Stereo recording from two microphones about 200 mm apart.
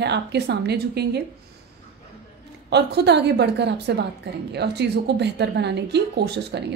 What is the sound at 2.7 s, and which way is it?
A woman's voice, 55° right (ahead or behind).